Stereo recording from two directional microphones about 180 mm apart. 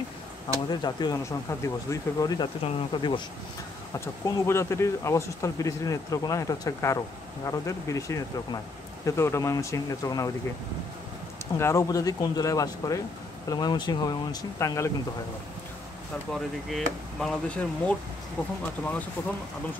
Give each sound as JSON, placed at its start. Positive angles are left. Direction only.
{"t": 0.7, "sound": "speech", "side_deg": 25}
{"t": 3.9, "sound": "speech", "side_deg": 15}
{"t": 11.5, "sound": "speech", "side_deg": 15}
{"t": 16.3, "sound": "speech", "side_deg": 0}
{"t": 19.2, "sound": "speech", "side_deg": 10}